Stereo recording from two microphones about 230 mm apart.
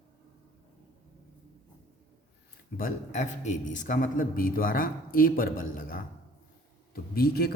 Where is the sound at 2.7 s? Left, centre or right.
Left.